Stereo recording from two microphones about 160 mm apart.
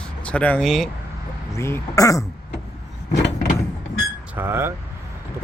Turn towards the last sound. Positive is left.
turn(degrees=-15)  # may be behind; listen again after turning